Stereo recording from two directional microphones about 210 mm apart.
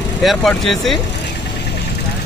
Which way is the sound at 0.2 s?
Centre (ahead or behind).